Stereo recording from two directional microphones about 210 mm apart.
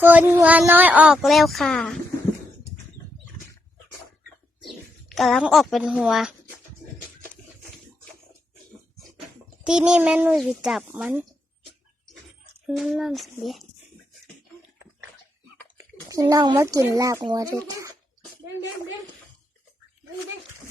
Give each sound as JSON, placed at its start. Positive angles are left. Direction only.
{"t": 0.0, "sound": "speech", "side_deg": -10}
{"t": 4.6, "sound": "speech", "side_deg": 0}
{"t": 9.6, "sound": "speech", "side_deg": -5}
{"t": 12.6, "sound": "speech", "side_deg": 0}
{"t": 15.8, "sound": "speech", "side_deg": -15}